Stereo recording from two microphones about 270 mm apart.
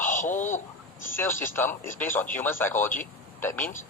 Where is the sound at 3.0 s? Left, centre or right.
Centre.